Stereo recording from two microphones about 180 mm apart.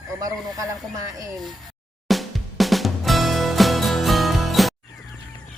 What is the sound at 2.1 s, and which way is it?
Music, centre (ahead or behind).